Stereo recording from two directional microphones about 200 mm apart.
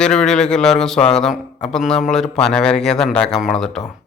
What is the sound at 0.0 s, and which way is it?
A man's voice, 5° left (ahead or behind).